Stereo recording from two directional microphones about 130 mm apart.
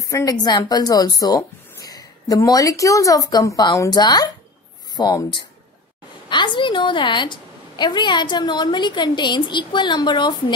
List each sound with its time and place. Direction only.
0.1 s a woman's voice: 30° left (ahead or behind)